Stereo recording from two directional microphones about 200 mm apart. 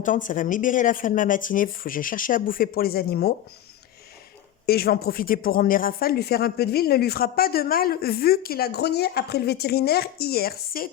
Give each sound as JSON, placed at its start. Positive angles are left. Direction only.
{"t": 0.0, "sound": "speech", "side_deg": 40}
{"t": 4.6, "sound": "speech", "side_deg": 50}